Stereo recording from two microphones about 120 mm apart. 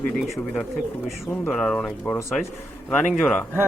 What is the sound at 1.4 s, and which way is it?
Speech, 5° left (ahead or behind).